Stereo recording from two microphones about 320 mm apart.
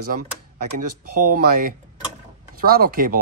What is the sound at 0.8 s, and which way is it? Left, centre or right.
Speech, right.